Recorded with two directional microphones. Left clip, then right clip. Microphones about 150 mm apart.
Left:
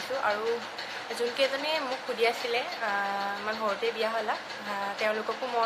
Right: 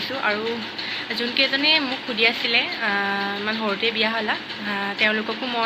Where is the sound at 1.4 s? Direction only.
15° left (ahead or behind).